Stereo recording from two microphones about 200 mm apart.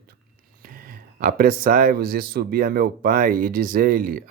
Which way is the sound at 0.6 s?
45° right (ahead or behind).